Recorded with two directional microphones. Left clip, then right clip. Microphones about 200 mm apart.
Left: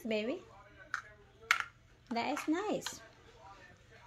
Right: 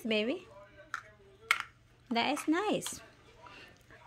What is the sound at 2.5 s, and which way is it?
Speech, 25° right (ahead or behind).